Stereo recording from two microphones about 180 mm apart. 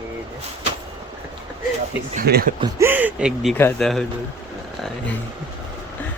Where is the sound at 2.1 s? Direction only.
60° right (ahead or behind).